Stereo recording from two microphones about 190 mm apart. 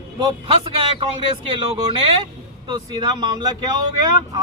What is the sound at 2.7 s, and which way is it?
Vehicle, 20° right (ahead or behind).